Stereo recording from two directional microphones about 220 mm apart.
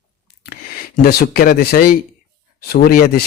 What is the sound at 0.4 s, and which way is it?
A man's voice, 40° left (ahead or behind).